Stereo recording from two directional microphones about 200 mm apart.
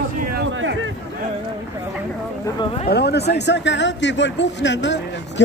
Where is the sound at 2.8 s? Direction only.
55° left (ahead or behind).